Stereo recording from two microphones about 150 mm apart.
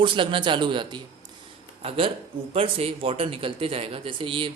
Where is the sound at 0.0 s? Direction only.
35° right (ahead or behind).